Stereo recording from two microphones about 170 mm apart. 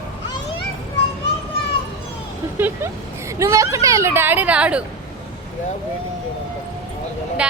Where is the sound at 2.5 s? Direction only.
10° right (ahead or behind).